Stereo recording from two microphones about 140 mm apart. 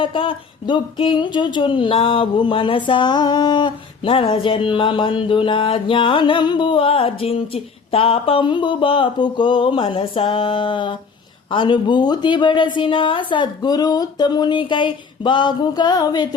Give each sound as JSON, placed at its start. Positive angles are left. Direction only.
{"t": 0.0, "sound": "speech", "side_deg": 35}